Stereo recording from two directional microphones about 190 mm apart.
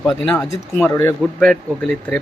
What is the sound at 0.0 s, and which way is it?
Speech, 10° left (ahead or behind).